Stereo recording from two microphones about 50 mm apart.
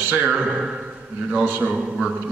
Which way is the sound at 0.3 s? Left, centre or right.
Centre.